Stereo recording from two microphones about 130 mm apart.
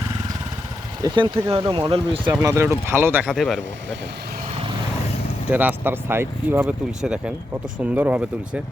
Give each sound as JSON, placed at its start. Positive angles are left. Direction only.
{"t": 1.0, "sound": "speech", "side_deg": -35}
{"t": 2.4, "sound": "speech", "side_deg": -20}
{"t": 3.3, "sound": "speech", "side_deg": 0}
{"t": 5.5, "sound": "speech", "side_deg": -10}
{"t": 7.0, "sound": "speech", "side_deg": -5}